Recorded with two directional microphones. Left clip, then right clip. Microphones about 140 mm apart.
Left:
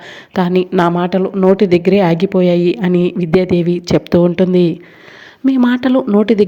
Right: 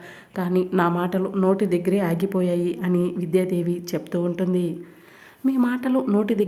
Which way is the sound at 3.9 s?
40° left (ahead or behind).